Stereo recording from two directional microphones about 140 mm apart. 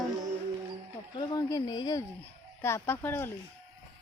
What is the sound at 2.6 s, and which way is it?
Speech, 20° left (ahead or behind).